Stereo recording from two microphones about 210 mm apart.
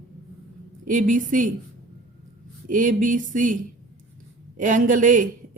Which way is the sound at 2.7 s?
40° right (ahead or behind).